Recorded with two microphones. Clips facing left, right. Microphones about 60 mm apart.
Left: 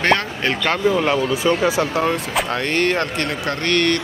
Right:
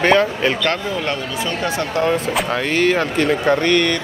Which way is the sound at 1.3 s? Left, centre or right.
Centre.